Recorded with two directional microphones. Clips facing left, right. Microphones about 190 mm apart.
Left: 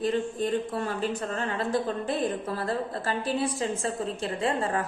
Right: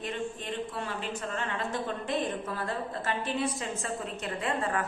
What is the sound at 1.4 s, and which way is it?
A woman's voice, 35° left (ahead or behind).